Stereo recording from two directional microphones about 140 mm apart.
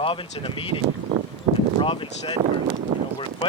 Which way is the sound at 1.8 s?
40° left (ahead or behind).